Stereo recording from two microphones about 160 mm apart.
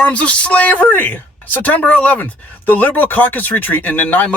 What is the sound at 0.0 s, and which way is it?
Speech, 10° left (ahead or behind).